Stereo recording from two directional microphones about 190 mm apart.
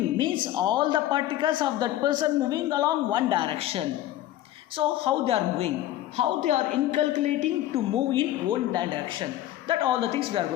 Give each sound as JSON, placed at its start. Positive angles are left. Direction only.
{"t": 0.2, "sound": "a woman's voice", "side_deg": -25}